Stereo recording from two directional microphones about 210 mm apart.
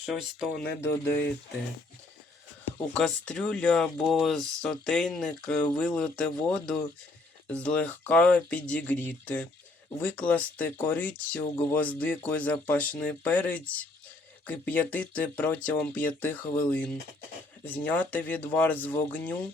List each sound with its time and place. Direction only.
0.0 s speech: 5° right (ahead or behind)
2.9 s speech: 5° left (ahead or behind)